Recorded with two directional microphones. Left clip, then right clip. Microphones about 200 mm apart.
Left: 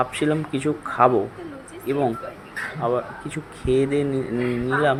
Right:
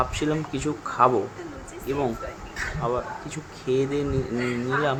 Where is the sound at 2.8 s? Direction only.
10° left (ahead or behind).